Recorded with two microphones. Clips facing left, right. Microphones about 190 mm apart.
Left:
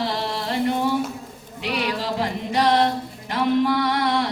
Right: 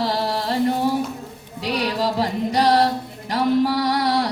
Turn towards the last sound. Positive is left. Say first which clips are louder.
# right 1 dB
turn(degrees=-35)  # may be behind; listen again after turning